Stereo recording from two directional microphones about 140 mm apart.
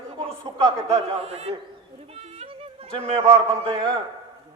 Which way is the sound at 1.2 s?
45° right (ahead or behind).